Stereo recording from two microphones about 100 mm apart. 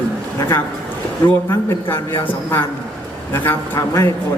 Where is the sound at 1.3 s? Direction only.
20° left (ahead or behind).